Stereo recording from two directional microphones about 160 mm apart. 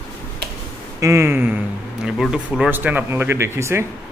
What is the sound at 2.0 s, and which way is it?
Speech, centre (ahead or behind).